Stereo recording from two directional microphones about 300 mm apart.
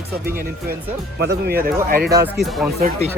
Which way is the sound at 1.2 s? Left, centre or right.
Right.